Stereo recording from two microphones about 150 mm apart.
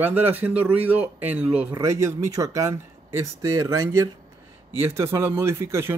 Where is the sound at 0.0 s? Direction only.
10° right (ahead or behind).